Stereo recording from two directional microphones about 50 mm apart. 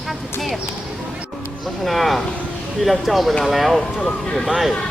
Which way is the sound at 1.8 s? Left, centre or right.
Centre.